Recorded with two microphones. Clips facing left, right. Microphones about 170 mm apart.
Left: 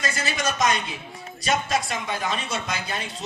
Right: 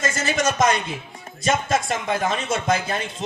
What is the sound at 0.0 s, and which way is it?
A man's voice, 45° right (ahead or behind).